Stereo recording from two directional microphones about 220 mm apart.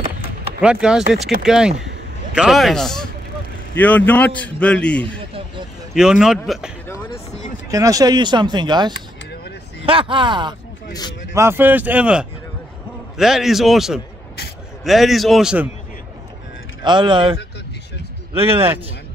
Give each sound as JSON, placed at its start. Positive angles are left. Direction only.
{"t": 0.6, "sound": "a man's voice", "side_deg": -5}
{"t": 7.7, "sound": "speech", "side_deg": -15}
{"t": 10.9, "sound": "speech", "side_deg": 20}
{"t": 11.3, "sound": "a man's voice", "side_deg": -10}
{"t": 16.8, "sound": "speech", "side_deg": -20}